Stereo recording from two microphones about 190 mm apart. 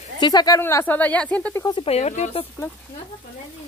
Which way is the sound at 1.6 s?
30° left (ahead or behind).